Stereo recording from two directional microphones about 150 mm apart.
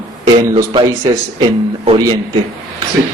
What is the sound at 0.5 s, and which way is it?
Speech, 35° right (ahead or behind).